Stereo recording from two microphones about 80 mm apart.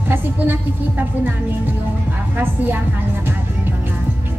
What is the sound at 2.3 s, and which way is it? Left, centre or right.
Speech, right.